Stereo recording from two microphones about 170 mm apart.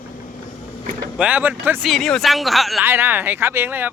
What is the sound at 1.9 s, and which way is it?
Snicker, centre (ahead or behind).